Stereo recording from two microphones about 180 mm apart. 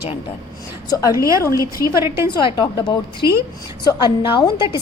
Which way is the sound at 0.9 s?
20° left (ahead or behind).